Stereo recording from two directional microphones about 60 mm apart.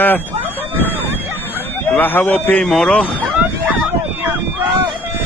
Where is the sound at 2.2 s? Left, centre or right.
Left.